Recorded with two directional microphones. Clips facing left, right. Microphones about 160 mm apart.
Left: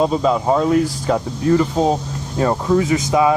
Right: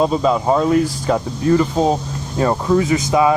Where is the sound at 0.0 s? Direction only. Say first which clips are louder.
Right 1 dB; 5° left (ahead or behind).